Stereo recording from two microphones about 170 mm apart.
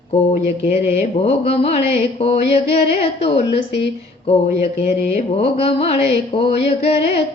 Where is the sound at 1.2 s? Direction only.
35° left (ahead or behind).